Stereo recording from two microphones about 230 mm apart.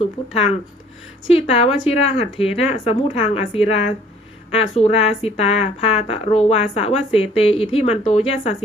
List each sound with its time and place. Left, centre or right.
1.3 s speech: left